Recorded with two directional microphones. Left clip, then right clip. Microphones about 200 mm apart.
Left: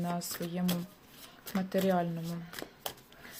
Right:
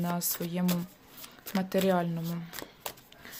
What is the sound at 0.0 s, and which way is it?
Speech, 15° right (ahead or behind).